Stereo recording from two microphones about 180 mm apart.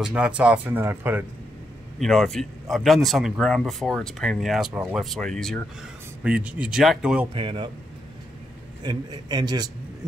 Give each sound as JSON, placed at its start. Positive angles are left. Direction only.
{"t": 0.0, "sound": "speech", "side_deg": -5}
{"t": 2.0, "sound": "speech", "side_deg": 0}
{"t": 7.3, "sound": "a man's voice", "side_deg": -30}
{"t": 8.8, "sound": "a man's voice", "side_deg": -25}